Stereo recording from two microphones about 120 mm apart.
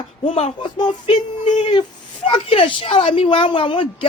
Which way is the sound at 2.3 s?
50° left (ahead or behind).